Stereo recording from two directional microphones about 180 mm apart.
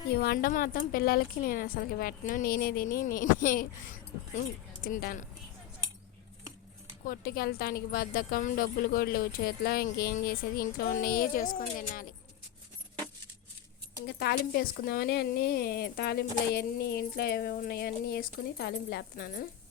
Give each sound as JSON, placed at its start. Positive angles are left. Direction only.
{"t": 0.2, "sound": "a woman's voice", "side_deg": 55}
{"t": 4.8, "sound": "a woman's voice", "side_deg": 55}
{"t": 7.0, "sound": "a woman's voice", "side_deg": 55}
{"t": 14.3, "sound": "a woman's voice", "side_deg": 60}